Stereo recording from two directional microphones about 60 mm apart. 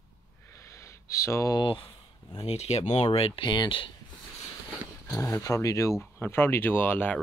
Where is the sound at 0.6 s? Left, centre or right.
Left.